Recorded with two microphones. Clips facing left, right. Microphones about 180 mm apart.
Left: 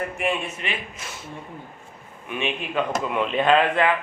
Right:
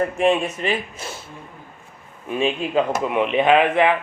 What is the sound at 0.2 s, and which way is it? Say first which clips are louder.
Speech: right 8 dB; 35° right (ahead or behind).